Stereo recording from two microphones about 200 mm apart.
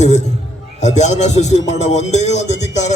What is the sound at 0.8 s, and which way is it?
A man's voice, 35° left (ahead or behind).